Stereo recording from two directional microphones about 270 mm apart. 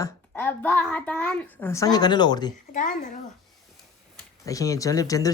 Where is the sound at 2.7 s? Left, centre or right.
Left.